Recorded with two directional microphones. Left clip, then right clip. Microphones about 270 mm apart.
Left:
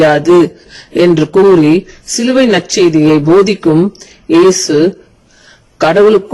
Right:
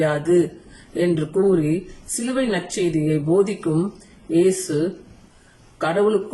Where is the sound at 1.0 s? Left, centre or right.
Left.